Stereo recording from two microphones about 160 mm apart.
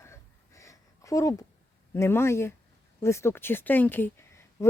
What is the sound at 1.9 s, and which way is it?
Speech, 15° left (ahead or behind).